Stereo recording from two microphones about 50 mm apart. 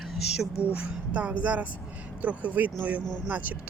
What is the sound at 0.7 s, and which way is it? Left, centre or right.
Speech, right.